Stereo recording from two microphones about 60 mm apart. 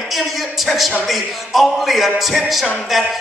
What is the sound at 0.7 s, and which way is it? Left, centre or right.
Speech, centre.